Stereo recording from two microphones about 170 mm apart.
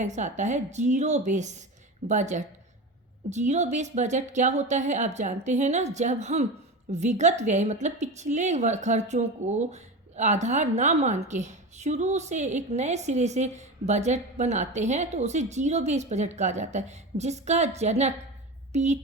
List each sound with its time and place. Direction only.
0.0 s a woman's voice: 45° right (ahead or behind)